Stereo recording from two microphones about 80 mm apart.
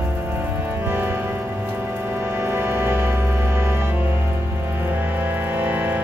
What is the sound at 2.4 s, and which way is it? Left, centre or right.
Music, right.